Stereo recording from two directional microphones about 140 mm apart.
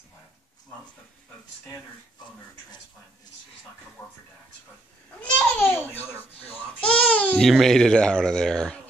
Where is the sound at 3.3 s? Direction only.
30° left (ahead or behind).